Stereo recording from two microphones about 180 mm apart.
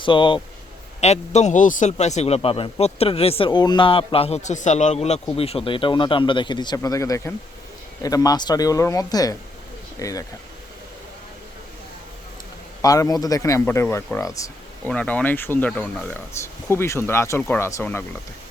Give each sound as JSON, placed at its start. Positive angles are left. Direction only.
{"t": 0.0, "sound": "speech", "side_deg": 25}
{"t": 1.0, "sound": "a man's voice", "side_deg": 40}
{"t": 12.8, "sound": "speech", "side_deg": 20}
{"t": 14.8, "sound": "speech", "side_deg": 5}